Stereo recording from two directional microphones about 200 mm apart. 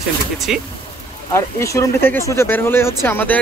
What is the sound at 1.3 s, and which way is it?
Speech, 15° left (ahead or behind).